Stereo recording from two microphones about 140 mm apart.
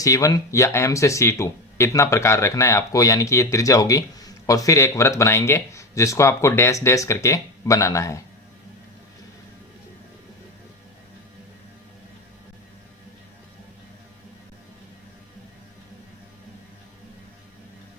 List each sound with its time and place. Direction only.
0.0 s speech: 25° left (ahead or behind)